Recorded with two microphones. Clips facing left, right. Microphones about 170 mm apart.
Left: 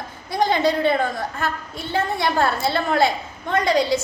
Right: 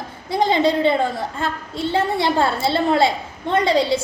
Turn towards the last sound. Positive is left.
turn(degrees=-25)  # may be behind; listen again after turning